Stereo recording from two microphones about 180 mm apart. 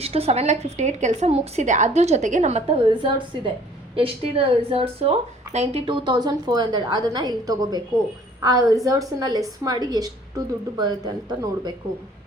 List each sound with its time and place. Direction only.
0.0 s a woman's voice: 35° right (ahead or behind)